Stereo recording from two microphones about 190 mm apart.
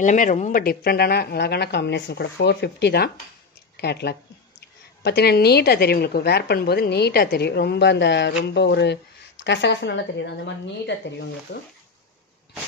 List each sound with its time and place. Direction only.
0.0 s a woman's voice: 40° left (ahead or behind); by 11.6 s 65° left (ahead or behind)